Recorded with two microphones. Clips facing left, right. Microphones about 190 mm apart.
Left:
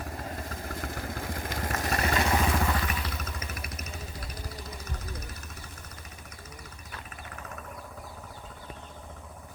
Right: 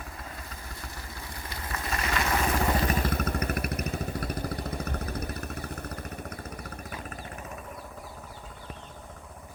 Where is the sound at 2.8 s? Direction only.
45° right (ahead or behind).